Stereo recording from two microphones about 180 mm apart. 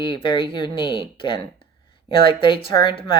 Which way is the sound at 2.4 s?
30° left (ahead or behind).